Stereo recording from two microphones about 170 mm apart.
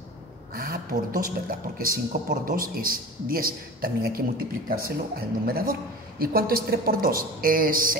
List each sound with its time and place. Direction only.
0.6 s speech: 55° right (ahead or behind)